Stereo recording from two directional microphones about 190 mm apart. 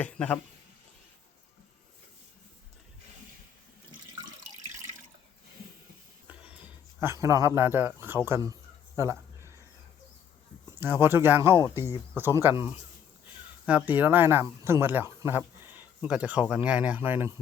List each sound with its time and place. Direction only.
0.0 s speech: 10° left (ahead or behind)
6.2 s speech: 5° right (ahead or behind)
9.0 s a sound: 15° right (ahead or behind)
10.7 s speech: 10° right (ahead or behind)